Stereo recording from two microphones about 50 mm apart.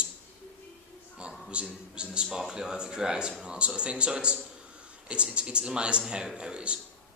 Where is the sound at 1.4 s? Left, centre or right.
Centre.